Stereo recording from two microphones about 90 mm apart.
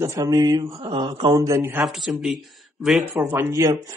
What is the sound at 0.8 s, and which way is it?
Mantra, 60° right (ahead or behind).